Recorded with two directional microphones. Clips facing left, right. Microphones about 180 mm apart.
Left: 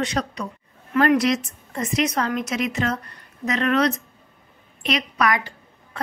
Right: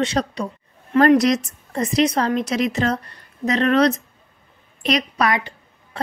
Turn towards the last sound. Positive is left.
turn(degrees=-25)  # may be behind; listen again after turning